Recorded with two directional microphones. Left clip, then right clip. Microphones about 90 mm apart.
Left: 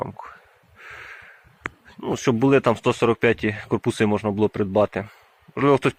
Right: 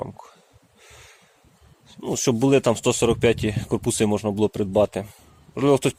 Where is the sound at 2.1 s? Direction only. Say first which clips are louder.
Left 1 dB; 55° right (ahead or behind).